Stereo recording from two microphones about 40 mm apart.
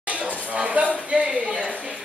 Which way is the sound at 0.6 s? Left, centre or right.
Right.